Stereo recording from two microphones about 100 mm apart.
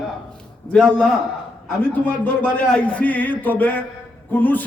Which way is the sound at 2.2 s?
15° left (ahead or behind).